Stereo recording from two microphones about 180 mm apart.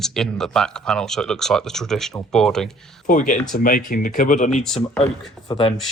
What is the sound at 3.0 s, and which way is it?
Speech, 45° left (ahead or behind).